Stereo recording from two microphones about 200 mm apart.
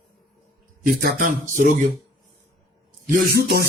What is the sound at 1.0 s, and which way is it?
Speech, 40° right (ahead or behind).